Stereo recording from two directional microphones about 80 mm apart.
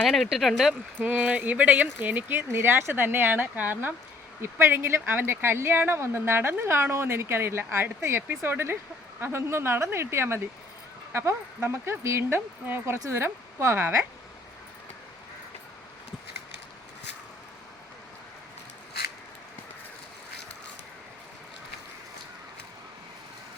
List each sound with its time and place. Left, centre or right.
0.0 s speech: centre
0.3 s speech: centre
1.0 s speech: centre